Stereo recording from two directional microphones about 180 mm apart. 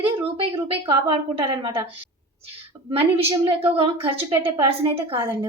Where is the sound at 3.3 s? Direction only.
30° right (ahead or behind).